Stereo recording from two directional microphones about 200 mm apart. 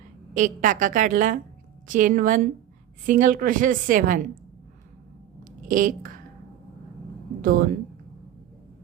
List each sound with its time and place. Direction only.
0.3 s a woman's voice: 40° right (ahead or behind)
5.6 s a woman's voice: 40° right (ahead or behind)
7.4 s speech: 45° right (ahead or behind)